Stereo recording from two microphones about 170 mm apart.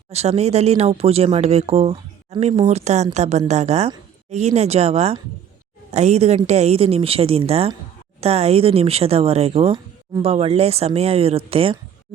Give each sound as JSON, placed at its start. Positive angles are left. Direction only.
{"t": 0.1, "sound": "speech", "side_deg": -40}